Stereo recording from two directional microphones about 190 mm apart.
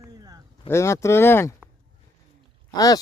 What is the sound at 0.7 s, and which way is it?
Speech, 15° left (ahead or behind).